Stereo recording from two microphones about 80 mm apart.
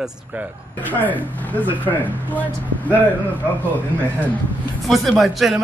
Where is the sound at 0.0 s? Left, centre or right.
Centre.